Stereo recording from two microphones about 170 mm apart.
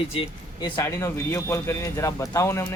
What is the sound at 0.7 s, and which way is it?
A man's voice, 15° left (ahead or behind).